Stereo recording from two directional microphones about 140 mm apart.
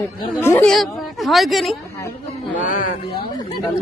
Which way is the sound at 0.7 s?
Centre (ahead or behind).